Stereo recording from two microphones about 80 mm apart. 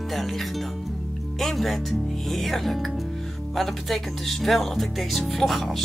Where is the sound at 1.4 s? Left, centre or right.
Centre.